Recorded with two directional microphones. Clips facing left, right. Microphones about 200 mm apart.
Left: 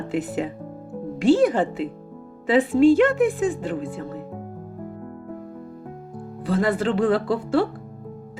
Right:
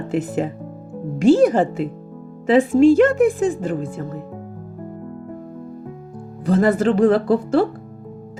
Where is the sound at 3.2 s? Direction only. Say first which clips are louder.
Right 4 dB; 45° right (ahead or behind).